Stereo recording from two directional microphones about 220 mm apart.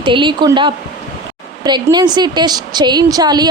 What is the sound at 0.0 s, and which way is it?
A woman's voice, 20° right (ahead or behind).